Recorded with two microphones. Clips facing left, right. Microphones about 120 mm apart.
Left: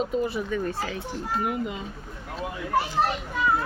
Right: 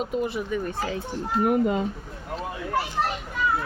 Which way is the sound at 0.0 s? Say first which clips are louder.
Left 1 dB; 10° right (ahead or behind).